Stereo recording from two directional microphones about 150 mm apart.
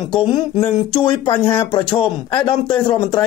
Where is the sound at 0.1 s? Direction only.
30° left (ahead or behind).